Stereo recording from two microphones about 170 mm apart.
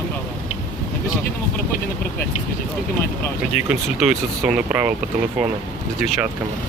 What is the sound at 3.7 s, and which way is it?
Speech, 5° right (ahead or behind).